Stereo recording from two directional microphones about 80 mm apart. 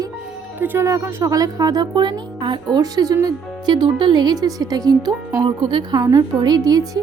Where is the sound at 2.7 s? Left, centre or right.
Right.